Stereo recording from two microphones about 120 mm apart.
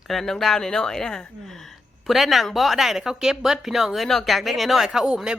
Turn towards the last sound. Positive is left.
turn(degrees=-5)  # may be behind; listen again after turning